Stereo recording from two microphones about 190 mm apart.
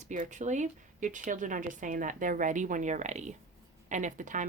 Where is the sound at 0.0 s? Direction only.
40° right (ahead or behind).